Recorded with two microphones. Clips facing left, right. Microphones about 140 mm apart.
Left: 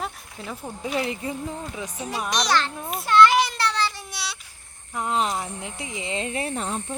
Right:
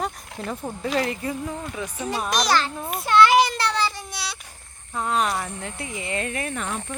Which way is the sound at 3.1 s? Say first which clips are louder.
Right 1 dB; centre (ahead or behind).